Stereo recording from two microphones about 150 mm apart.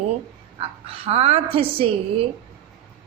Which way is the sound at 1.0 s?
40° right (ahead or behind).